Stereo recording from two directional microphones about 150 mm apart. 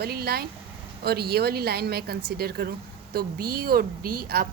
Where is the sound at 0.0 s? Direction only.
90° right.